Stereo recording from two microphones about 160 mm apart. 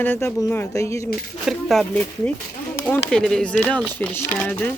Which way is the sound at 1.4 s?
Centre (ahead or behind).